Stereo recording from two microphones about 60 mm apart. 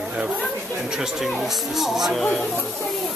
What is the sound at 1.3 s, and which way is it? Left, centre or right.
Speech, centre.